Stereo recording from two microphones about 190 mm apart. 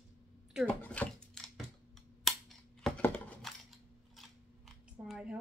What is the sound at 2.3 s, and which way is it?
Scissors, centre (ahead or behind).